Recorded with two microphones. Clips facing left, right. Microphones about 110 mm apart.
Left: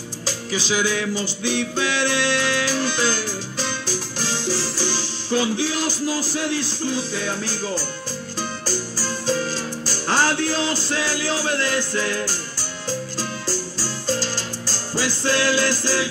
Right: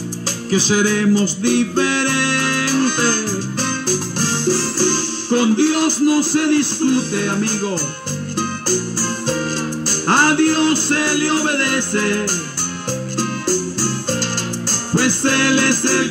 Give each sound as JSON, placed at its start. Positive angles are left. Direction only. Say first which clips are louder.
{"t": 0.5, "sound": "music", "louder": "right 7 dB", "side_deg": -50}
{"t": 13.2, "sound": "music", "louder": "right 8 dB", "side_deg": -55}